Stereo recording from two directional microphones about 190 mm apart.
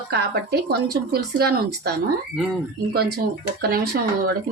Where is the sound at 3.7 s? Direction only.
55° right (ahead or behind).